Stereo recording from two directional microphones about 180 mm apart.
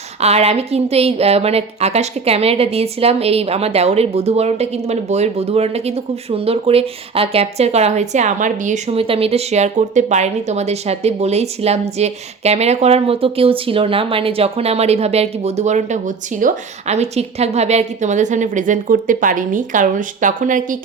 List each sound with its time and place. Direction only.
0.2 s speech: 35° right (ahead or behind)